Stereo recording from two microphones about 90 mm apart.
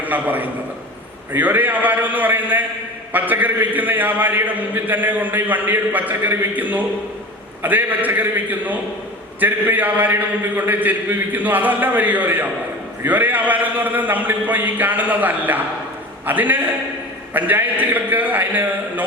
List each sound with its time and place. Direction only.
0.0 s a man's voice: 20° right (ahead or behind)